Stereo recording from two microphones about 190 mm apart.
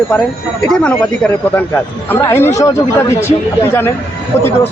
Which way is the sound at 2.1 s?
15° left (ahead or behind).